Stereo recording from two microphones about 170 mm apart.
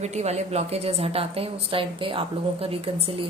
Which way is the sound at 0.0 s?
40° right (ahead or behind).